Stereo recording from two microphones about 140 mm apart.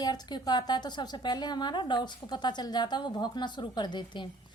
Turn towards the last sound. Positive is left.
turn(degrees=35)  # may be behind; listen again after turning